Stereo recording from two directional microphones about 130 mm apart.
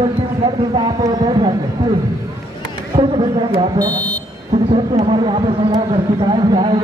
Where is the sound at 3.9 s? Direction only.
10° left (ahead or behind).